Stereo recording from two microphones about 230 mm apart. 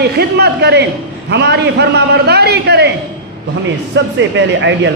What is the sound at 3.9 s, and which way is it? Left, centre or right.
Speech, right.